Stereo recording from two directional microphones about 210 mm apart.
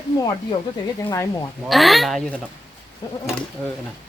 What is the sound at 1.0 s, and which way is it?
Speech, 15° left (ahead or behind).